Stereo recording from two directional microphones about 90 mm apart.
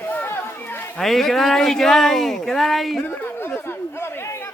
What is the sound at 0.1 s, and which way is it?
Run, 20° left (ahead or behind).